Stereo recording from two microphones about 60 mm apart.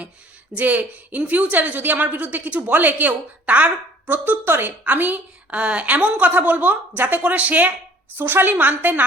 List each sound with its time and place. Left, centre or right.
0.5 s a woman's voice: right
8.1 s a woman's voice: right